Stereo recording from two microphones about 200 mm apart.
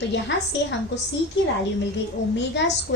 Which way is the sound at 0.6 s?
60° left (ahead or behind).